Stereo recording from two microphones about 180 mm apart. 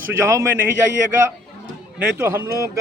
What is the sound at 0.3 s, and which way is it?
Speech, 15° right (ahead or behind).